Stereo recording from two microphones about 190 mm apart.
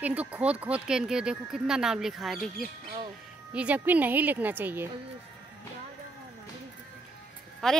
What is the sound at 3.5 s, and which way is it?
A woman's voice, 5° right (ahead or behind).